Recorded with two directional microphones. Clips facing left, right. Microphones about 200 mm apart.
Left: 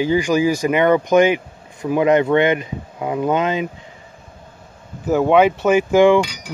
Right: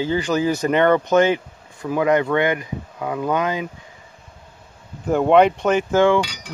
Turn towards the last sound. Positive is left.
turn(degrees=10)  # may be behind; listen again after turning